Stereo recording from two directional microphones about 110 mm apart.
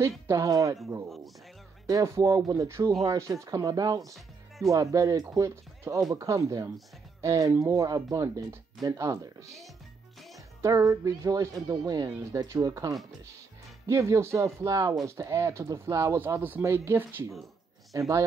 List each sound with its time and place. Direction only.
0.3 s speech: 30° right (ahead or behind)
10.6 s speech: 30° right (ahead or behind)